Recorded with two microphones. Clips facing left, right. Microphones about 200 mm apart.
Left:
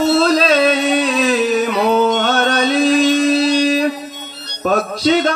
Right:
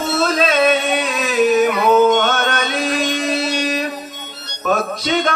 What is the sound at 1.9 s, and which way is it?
Music, 35° left (ahead or behind).